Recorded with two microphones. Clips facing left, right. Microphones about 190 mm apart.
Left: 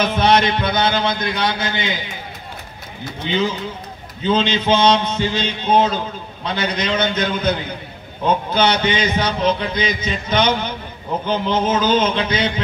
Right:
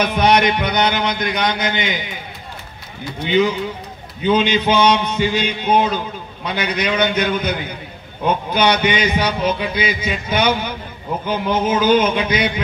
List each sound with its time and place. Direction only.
0.0 s music: 15° right (ahead or behind)
4.2 s music: 15° right (ahead or behind)
8.5 s music: 15° right (ahead or behind)